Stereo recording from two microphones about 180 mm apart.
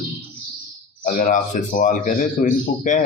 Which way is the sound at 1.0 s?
50° left (ahead or behind).